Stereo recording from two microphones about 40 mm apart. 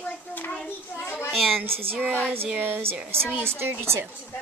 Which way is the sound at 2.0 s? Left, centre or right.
Right.